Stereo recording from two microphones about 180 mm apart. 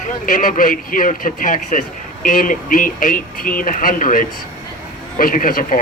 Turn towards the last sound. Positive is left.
turn(degrees=50)  # may be behind; listen again after turning